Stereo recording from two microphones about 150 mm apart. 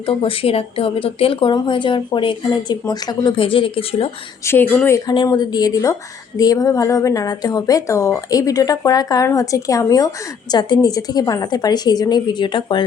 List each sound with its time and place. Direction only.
0.0 s a woman's voice: 40° left (ahead or behind)
4.4 s speech: 15° left (ahead or behind)
5.0 s a woman's voice: 30° left (ahead or behind)